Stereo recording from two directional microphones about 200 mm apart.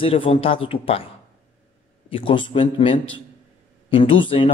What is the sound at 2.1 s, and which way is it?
Speech, 25° left (ahead or behind).